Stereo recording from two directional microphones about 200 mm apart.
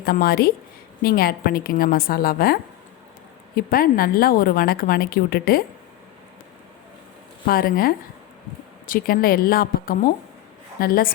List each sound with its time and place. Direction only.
0.0 s a woman's voice: 50° left (ahead or behind)
7.4 s a woman's voice: 50° left (ahead or behind)